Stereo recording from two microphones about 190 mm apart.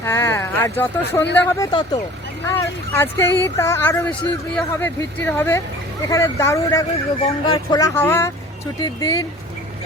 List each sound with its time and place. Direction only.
0.0 s speech: 15° left (ahead or behind)